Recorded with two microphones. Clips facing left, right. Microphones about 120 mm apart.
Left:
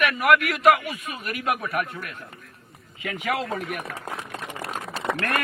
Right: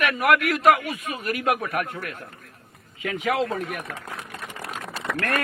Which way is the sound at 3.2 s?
30° right (ahead or behind).